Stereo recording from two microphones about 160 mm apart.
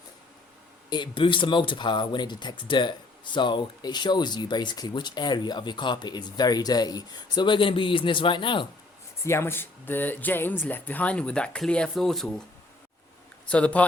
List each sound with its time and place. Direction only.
0.9 s speech: 30° left (ahead or behind)
9.2 s speech: 15° left (ahead or behind)
13.5 s speech: 10° left (ahead or behind)